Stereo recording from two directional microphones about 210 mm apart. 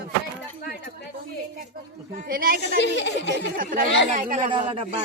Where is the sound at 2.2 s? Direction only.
45° right (ahead or behind).